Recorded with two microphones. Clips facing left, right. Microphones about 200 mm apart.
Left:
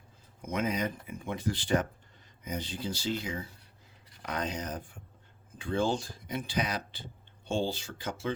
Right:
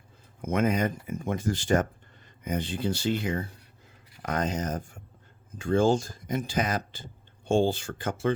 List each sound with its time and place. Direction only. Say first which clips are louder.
0.4 s speech: right 6 dB; 50° right (ahead or behind)
4.2 s speech: right 6 dB; 45° right (ahead or behind)